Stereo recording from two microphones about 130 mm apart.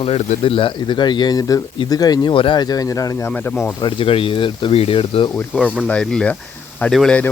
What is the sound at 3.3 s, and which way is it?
Speech, 10° left (ahead or behind).